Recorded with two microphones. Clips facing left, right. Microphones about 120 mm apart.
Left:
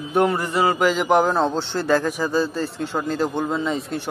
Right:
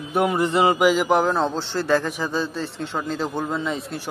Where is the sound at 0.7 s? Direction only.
10° right (ahead or behind).